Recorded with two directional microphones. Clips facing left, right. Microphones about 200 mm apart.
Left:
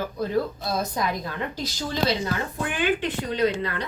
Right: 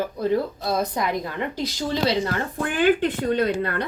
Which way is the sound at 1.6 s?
75° right (ahead or behind).